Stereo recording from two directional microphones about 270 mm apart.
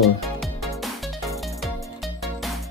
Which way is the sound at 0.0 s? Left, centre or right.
Centre.